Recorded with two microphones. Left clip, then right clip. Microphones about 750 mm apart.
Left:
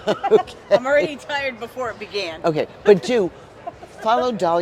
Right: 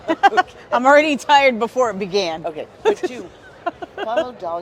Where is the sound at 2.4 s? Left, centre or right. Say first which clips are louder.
Left 6 dB; left.